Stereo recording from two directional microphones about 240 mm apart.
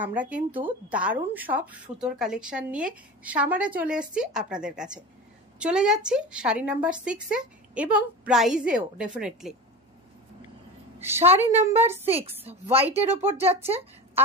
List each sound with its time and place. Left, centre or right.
0.0 s speech: centre
11.0 s a woman's voice: centre
12.7 s speech: right